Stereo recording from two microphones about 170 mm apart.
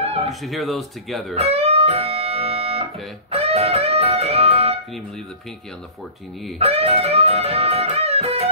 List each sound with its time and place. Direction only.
0.0 s music: 35° right (ahead or behind)
0.3 s speech: centre (ahead or behind)
1.3 s speech: 35° right (ahead or behind)
3.3 s music: 35° right (ahead or behind)
6.6 s music: 35° right (ahead or behind)